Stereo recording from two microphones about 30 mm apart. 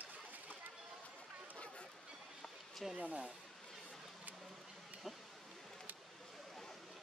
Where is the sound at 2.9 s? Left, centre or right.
Right.